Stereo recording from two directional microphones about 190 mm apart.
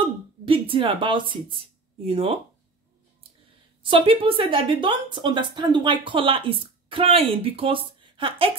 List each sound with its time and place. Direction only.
0.0 s a sound: 25° right (ahead or behind)
2.0 s speech: 30° right (ahead or behind)
3.8 s a woman's voice: 25° right (ahead or behind)